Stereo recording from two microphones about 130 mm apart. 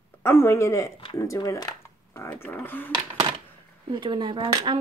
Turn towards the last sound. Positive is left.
turn(degrees=-35)  # may be behind; listen again after turning